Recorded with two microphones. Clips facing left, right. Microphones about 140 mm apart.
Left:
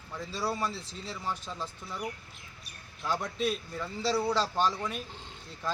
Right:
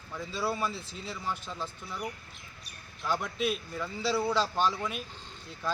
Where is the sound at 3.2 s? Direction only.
35° left (ahead or behind).